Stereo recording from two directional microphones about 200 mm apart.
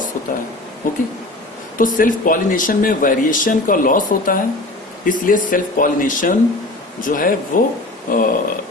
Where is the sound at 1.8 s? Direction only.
45° left (ahead or behind).